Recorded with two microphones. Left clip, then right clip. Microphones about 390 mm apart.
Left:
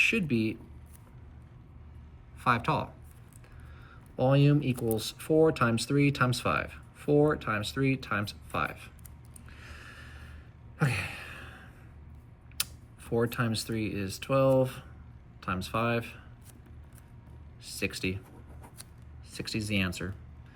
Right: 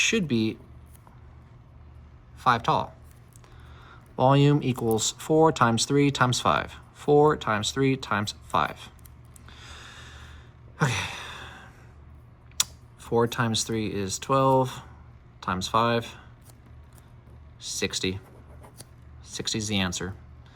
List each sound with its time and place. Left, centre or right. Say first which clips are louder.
0.0 s speech: right 2 dB; centre
2.4 s speech: right 5 dB; centre
9.5 s snort: right 4 dB; centre
10.8 s sigh: right 5 dB; centre
12.5 s speech: right 8 dB; centre
17.6 s speech: right 5 dB; centre
19.4 s speech: right 4 dB; centre